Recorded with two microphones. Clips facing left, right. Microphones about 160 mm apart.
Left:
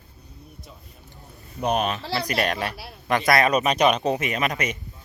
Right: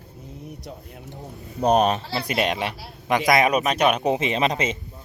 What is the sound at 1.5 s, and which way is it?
Speech, 35° right (ahead or behind).